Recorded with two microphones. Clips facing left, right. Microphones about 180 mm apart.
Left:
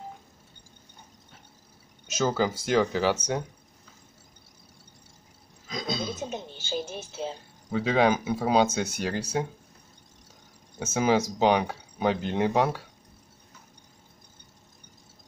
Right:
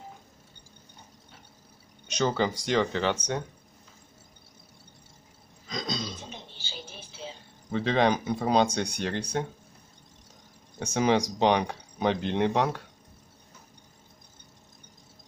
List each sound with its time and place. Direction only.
2.0 s speech: 5° left (ahead or behind)
5.7 s a sound: 5° left (ahead or behind)
6.3 s music: 45° left (ahead or behind)
7.7 s speech: 5° left (ahead or behind)
10.8 s speech: 5° left (ahead or behind)